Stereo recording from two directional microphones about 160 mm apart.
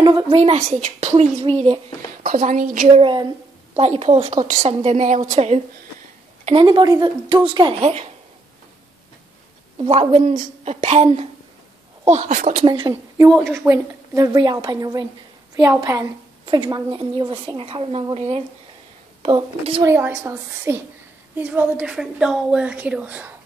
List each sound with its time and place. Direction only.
0.0 s a woman's voice: 25° right (ahead or behind)
0.4 s a woman's voice: 45° right (ahead or behind)
2.2 s a woman's voice: 50° right (ahead or behind)
3.0 s a woman's voice: 30° right (ahead or behind)
6.4 s a woman's voice: 30° right (ahead or behind)
7.8 s a woman's voice: 45° right (ahead or behind)
9.8 s a woman's voice: 40° right (ahead or behind)
12.1 s a woman's voice: 50° right (ahead or behind)
12.6 s a woman's voice: 30° right (ahead or behind)
13.5 s a woman's voice: 15° right (ahead or behind); by 19.8 s 35° right (ahead or behind)
19.8 s a woman's voice: 15° right (ahead or behind)